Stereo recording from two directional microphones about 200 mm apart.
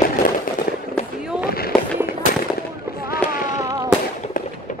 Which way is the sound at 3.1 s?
45° left (ahead or behind).